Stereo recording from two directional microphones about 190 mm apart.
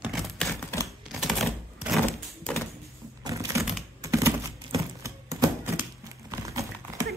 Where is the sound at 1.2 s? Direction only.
Centre (ahead or behind).